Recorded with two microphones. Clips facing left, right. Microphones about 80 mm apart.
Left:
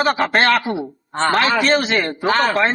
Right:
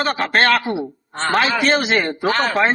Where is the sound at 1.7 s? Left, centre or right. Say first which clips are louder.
Even; centre.